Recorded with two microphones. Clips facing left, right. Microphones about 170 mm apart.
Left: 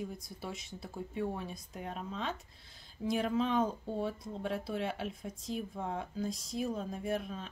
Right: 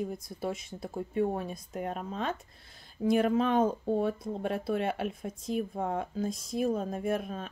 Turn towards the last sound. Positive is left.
turn(degrees=-50)  # may be behind; listen again after turning